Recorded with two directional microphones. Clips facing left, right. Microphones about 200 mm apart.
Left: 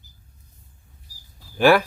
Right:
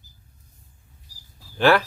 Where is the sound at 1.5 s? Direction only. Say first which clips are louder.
Left 2 dB; 10° left (ahead or behind).